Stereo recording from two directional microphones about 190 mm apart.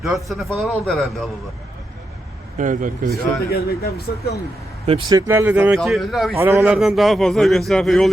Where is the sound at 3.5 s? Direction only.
55° left (ahead or behind).